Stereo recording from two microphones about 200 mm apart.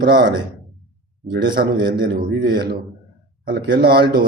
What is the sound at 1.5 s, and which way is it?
A man's voice, 50° right (ahead or behind).